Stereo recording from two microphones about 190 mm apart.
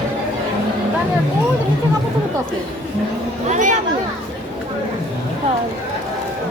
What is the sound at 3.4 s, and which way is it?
Speech, 40° right (ahead or behind).